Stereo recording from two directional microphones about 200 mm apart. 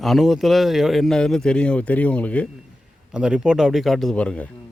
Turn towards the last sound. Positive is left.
turn(degrees=5)  # may be behind; listen again after turning